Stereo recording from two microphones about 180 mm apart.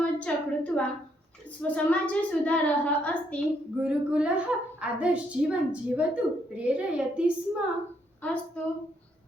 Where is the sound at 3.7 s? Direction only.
5° right (ahead or behind).